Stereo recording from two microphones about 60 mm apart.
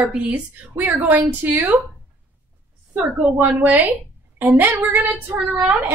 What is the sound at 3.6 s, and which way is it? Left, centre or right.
Speech, right.